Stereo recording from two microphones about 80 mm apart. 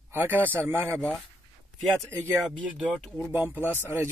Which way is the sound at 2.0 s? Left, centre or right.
Right.